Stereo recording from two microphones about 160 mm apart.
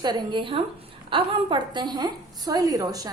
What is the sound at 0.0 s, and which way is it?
A woman's voice, 30° right (ahead or behind).